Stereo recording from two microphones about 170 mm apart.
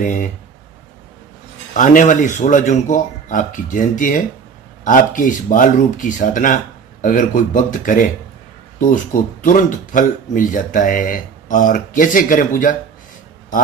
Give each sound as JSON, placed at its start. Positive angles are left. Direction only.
{"t": 0.0, "sound": "speech", "side_deg": 50}
{"t": 1.7, "sound": "speech", "side_deg": 50}